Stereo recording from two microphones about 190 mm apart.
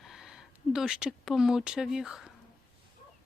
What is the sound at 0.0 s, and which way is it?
Speech, centre (ahead or behind).